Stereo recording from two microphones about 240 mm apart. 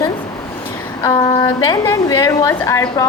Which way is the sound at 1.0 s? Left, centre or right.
Centre.